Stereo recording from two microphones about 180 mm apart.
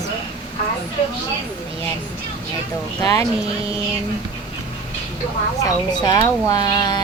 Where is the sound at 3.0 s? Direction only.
15° left (ahead or behind).